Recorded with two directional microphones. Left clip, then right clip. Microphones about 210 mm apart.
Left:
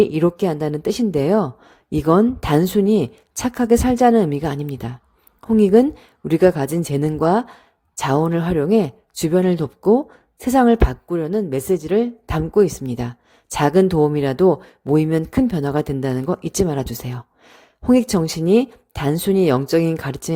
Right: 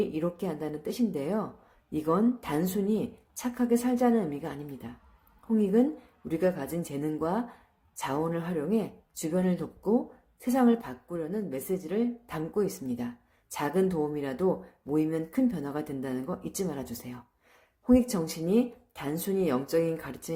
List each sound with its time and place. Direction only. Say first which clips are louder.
0.0 s a woman's voice: left 14 dB; 45° left (ahead or behind)